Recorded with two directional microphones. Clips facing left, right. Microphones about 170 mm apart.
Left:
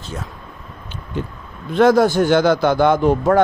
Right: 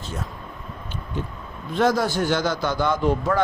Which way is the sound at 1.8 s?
55° left (ahead or behind).